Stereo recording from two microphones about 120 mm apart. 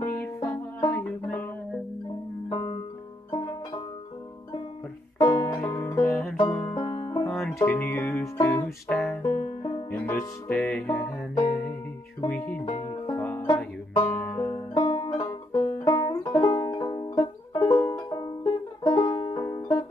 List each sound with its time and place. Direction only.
0.0 s music: 25° left (ahead or behind)
0.9 s music: 10° left (ahead or behind)
2.5 s music: 40° left (ahead or behind)
5.2 s music: 30° left (ahead or behind)
6.4 s banjo: 35° left (ahead or behind)
7.2 s music: 5° left (ahead or behind)
7.5 s music: 20° left (ahead or behind)
8.9 s music: 10° left (ahead or behind)
9.2 s banjo: 35° left (ahead or behind)
9.8 s music: 15° left (ahead or behind)
10.9 s music: 25° left (ahead or behind)
12.3 s music: 10° left (ahead or behind)
14.5 s banjo: 35° left (ahead or behind)